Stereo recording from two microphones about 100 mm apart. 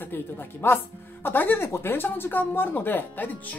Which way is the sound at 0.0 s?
20° left (ahead or behind).